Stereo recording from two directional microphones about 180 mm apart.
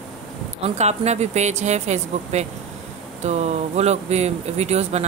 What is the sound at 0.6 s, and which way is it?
Speech, 40° right (ahead or behind).